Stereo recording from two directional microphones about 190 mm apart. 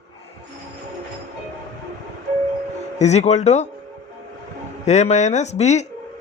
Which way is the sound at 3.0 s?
35° left (ahead or behind).